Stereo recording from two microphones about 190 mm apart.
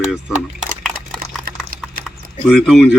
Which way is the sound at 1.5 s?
55° right (ahead or behind).